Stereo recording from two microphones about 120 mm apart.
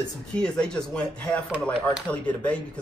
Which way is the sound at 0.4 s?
5° left (ahead or behind).